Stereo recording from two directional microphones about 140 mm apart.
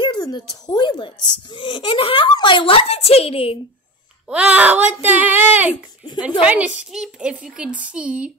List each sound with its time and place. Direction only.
0.0 s speech: 30° left (ahead or behind)
4.3 s speech: 10° right (ahead or behind)